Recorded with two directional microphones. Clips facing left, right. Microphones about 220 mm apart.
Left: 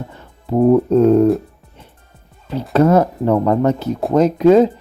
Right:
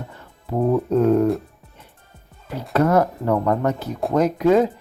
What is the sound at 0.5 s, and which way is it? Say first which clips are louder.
Speech: left 7 dB; 35° left (ahead or behind).